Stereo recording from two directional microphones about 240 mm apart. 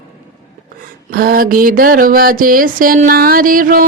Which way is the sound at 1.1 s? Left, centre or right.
Right.